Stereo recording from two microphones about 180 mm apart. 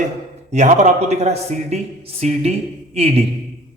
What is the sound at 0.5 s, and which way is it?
A man's voice, 40° right (ahead or behind).